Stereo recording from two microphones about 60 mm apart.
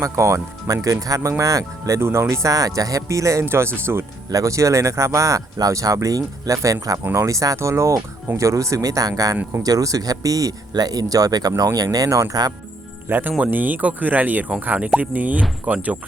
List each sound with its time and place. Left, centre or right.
0.0 s speech: right
2.0 s speech: right
2.3 s speech: right
3.4 s speech: right
4.3 s speech: right
7.0 s speech: right
13.1 s speech: right